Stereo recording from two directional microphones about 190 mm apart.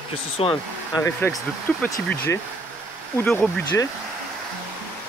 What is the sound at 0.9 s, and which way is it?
Speech, 15° left (ahead or behind).